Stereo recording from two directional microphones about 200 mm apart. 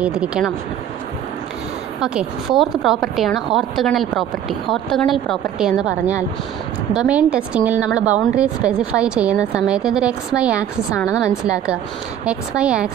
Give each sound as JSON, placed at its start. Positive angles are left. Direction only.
{"t": 0.0, "sound": "a woman's voice", "side_deg": -5}
{"t": 2.0, "sound": "a woman's voice", "side_deg": -5}
{"t": 11.0, "sound": "a woman's voice", "side_deg": 15}
{"t": 11.2, "sound": "a woman's voice", "side_deg": -5}